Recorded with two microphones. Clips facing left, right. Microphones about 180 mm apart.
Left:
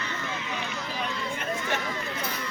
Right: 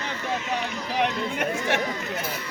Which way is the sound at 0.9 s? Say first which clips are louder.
Right 9 dB; 75° right (ahead or behind).